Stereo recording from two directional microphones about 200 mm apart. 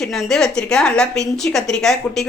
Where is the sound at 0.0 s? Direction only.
Centre (ahead or behind).